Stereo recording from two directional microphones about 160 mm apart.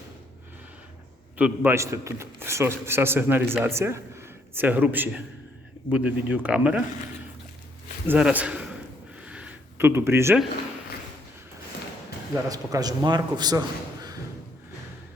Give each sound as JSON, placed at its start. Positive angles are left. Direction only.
{"t": 1.4, "sound": "a man's voice", "side_deg": -10}
{"t": 8.0, "sound": "a man's voice", "side_deg": -10}
{"t": 9.2, "sound": "a sound", "side_deg": -5}
{"t": 12.5, "sound": "a man's voice", "side_deg": -25}